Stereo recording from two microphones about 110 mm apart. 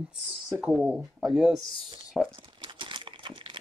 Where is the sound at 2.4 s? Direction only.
45° right (ahead or behind).